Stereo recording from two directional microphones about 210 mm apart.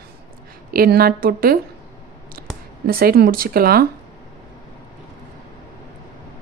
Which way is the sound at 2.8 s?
45° right (ahead or behind).